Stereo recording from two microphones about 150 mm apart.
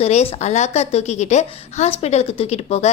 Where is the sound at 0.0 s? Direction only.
45° left (ahead or behind).